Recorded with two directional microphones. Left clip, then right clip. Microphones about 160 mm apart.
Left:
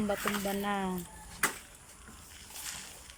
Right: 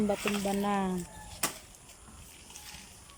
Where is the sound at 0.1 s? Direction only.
15° right (ahead or behind).